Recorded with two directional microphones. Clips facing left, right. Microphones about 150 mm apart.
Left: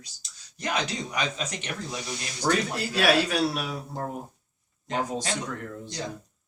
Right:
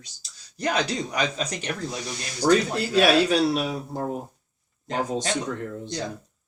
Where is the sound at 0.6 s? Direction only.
35° right (ahead or behind).